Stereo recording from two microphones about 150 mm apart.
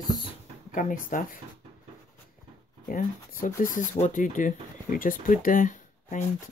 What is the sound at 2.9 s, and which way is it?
Speech, 65° left (ahead or behind).